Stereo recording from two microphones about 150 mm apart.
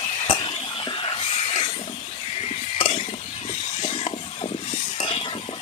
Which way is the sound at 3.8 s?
40° left (ahead or behind).